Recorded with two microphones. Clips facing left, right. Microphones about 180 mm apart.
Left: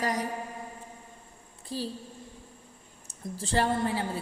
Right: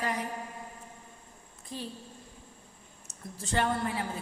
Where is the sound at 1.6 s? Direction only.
35° left (ahead or behind).